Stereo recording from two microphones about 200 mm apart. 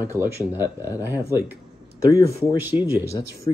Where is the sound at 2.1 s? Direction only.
15° left (ahead or behind).